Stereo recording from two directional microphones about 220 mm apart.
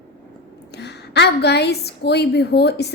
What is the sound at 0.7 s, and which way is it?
A woman's voice, 50° left (ahead or behind).